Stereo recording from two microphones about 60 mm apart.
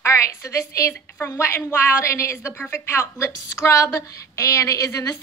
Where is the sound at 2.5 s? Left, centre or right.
Left.